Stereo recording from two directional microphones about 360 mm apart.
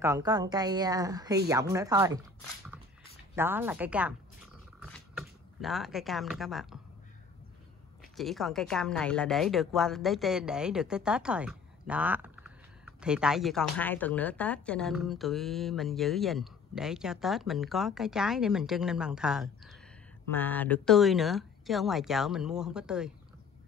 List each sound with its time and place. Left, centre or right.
0.0 s a woman's voice: centre
3.3 s speech: centre
8.0 s speech: centre